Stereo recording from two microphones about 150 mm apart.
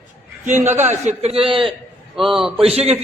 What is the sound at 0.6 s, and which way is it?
Speech, 15° right (ahead or behind).